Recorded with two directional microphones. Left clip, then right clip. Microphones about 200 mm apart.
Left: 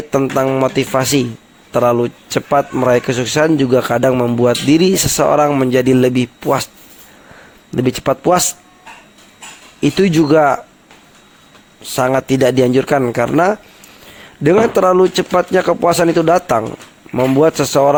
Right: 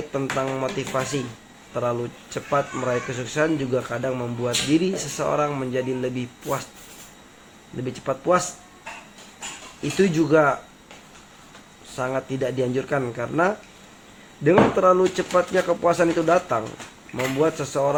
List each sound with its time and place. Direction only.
0.1 s speech: 50° left (ahead or behind)
7.9 s speech: 55° left (ahead or behind)
10.0 s speech: 50° left (ahead or behind)
11.9 s speech: 55° left (ahead or behind)